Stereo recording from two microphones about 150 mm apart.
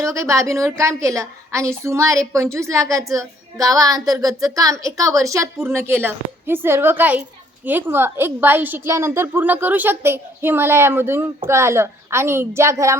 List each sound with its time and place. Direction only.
0.0 s a woman's voice: 20° right (ahead or behind)